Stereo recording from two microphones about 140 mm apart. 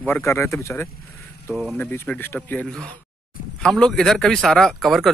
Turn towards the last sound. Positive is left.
turn(degrees=0)  # may be behind; listen again after turning